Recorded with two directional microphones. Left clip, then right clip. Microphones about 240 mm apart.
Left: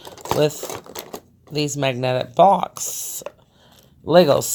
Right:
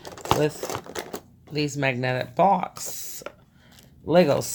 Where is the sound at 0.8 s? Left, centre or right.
Centre.